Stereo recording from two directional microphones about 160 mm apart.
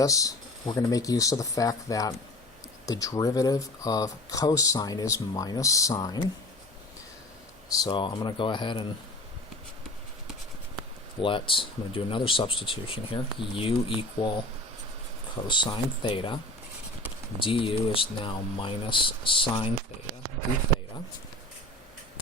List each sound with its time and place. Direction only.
0.0 s speech: 20° left (ahead or behind)
7.8 s speech: 30° left (ahead or behind)
11.2 s speech: 35° left (ahead or behind)
15.4 s speech: 30° left (ahead or behind)
17.4 s speech: 35° left (ahead or behind)